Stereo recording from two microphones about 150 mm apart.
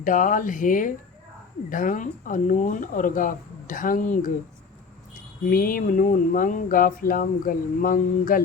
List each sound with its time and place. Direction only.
0.0 s speech: 60° left (ahead or behind)
5.5 s speech: 70° left (ahead or behind)